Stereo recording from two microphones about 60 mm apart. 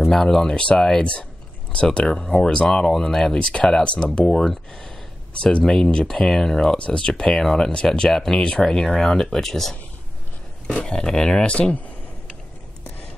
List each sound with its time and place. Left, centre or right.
0.1 s speech: centre